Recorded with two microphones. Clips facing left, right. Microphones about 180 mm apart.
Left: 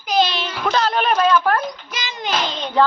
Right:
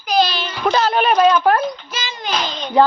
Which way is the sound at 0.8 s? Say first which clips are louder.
Right 3 dB; 5° right (ahead or behind).